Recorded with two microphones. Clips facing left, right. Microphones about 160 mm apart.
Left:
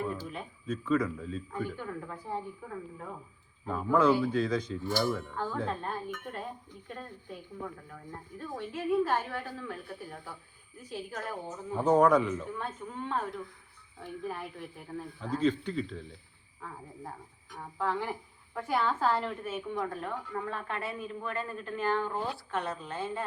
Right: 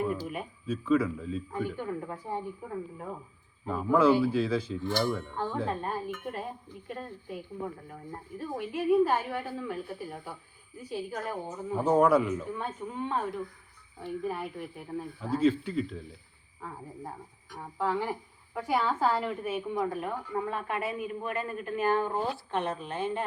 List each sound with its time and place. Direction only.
0.0 s a woman's voice: 10° right (ahead or behind)
2.6 s speech: 20° right (ahead or behind)
3.7 s a woman's voice: 5° right (ahead or behind)
4.8 s a woman's voice: 10° left (ahead or behind)
17.5 s a woman's voice: 10° right (ahead or behind)